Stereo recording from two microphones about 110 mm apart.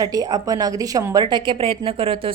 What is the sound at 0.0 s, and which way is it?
A woman's voice, 35° right (ahead or behind).